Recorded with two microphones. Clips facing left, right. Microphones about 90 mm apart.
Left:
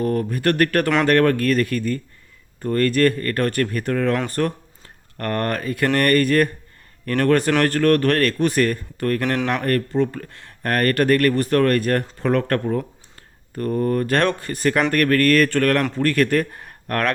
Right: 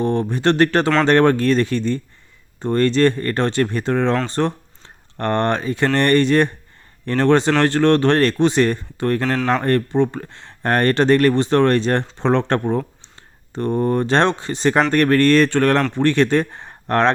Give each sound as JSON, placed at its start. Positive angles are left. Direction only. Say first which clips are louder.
{"t": 0.0, "sound": "speech", "louder": "right 2 dB", "side_deg": -25}